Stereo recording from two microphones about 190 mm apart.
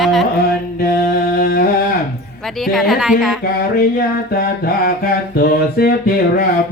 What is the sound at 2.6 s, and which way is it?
Speech, centre (ahead or behind).